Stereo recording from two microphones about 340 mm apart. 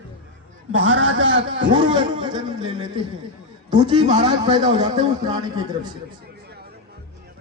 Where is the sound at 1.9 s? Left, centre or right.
Centre.